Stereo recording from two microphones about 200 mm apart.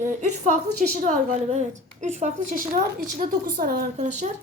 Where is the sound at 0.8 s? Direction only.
40° right (ahead or behind).